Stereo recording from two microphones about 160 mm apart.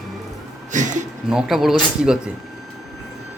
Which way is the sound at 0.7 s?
50° right (ahead or behind).